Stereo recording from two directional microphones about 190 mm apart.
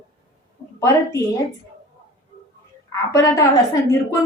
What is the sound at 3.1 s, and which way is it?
A woman's voice, 20° left (ahead or behind).